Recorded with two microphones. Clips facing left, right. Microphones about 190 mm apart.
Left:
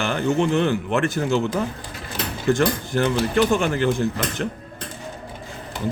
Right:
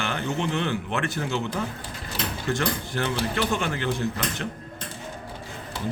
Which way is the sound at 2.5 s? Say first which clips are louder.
Left 8 dB; 45° left (ahead or behind).